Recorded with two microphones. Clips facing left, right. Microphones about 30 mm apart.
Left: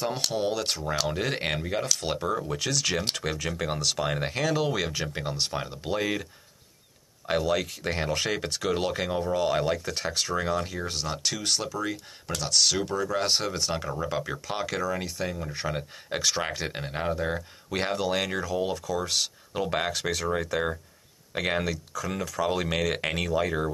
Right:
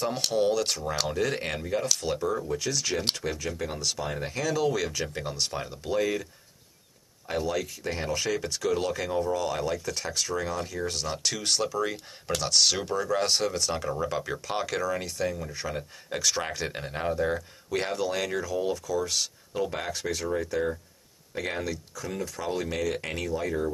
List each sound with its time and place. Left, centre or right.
0.0 s speech: centre
1.1 s speech: left
2.0 s speech: left
3.2 s speech: left
4.5 s speech: left
7.2 s speech: left
10.9 s speech: centre
15.5 s speech: left
21.3 s speech: left
22.8 s speech: left
23.0 s speech: left